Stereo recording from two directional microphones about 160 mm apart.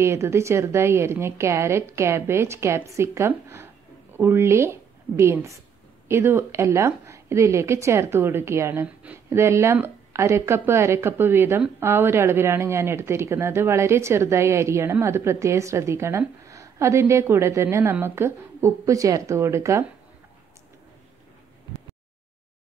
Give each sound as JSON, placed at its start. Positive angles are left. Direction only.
{"t": 0.0, "sound": "a woman's voice", "side_deg": -15}